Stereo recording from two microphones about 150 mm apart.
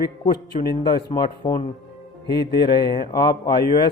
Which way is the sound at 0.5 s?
45° left (ahead or behind).